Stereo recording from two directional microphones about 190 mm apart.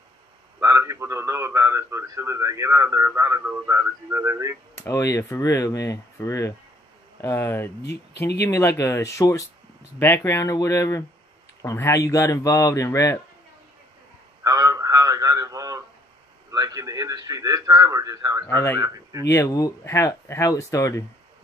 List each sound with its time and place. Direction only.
0.6 s a man's voice: 15° right (ahead or behind)
4.8 s speech: 15° left (ahead or behind)
7.8 s speech: 60° left (ahead or behind)
8.4 s speech: 15° left (ahead or behind)
14.4 s a sound: 20° right (ahead or behind)
16.5 s a man's voice: 15° right (ahead or behind)
18.5 s speech: 15° left (ahead or behind)